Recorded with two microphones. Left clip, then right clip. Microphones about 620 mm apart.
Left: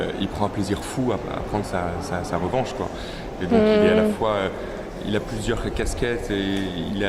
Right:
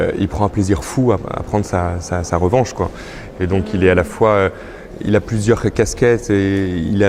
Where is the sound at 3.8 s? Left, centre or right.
Right.